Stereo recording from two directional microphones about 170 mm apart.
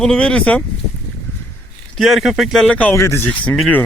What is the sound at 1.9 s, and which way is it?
Speech, centre (ahead or behind).